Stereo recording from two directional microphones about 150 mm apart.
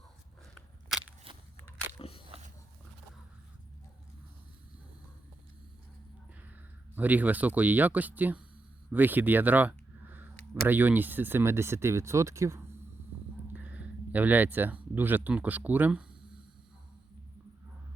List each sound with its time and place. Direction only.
2.0 s biting: 40° left (ahead or behind)
6.9 s speech: 10° right (ahead or behind)
8.9 s a sound: 10° right (ahead or behind)
10.7 s speech: 10° right (ahead or behind)